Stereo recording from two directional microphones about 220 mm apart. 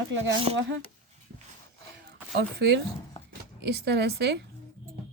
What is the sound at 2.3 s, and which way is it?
A woman's voice, 50° right (ahead or behind).